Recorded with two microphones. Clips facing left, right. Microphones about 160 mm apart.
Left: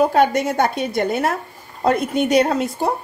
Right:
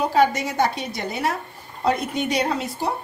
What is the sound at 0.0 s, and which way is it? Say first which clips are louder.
A woman's voice: left 4 dB; 55° left (ahead or behind).